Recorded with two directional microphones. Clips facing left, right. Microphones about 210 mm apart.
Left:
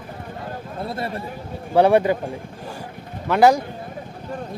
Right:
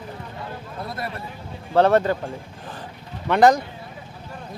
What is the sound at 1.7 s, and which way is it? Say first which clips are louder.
Speech: left 2 dB; 10° left (ahead or behind).